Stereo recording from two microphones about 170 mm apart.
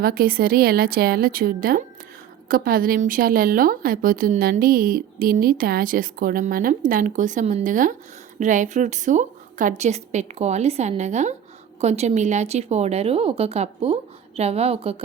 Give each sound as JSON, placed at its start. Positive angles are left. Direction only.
{"t": 0.0, "sound": "a woman's voice", "side_deg": -60}